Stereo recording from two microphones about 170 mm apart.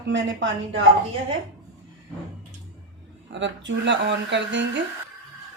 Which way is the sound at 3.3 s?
90° right.